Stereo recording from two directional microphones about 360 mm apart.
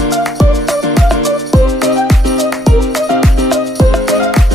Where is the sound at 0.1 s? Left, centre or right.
Centre.